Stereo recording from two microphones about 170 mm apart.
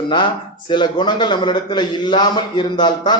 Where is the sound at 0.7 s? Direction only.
25° left (ahead or behind).